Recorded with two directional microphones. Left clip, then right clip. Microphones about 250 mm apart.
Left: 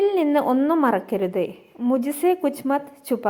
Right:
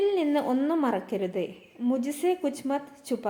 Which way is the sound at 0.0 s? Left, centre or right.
Centre.